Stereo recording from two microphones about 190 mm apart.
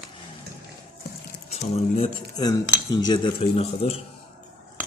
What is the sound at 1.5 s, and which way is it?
Cutlery, 30° left (ahead or behind).